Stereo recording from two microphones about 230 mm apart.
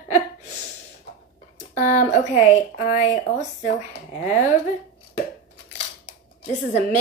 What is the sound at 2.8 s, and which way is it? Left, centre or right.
Speech, left.